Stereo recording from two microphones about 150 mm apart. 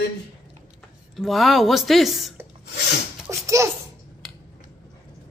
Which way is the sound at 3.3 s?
20° right (ahead or behind).